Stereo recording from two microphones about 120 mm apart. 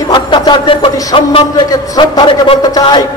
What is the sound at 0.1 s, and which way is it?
Music, 40° left (ahead or behind).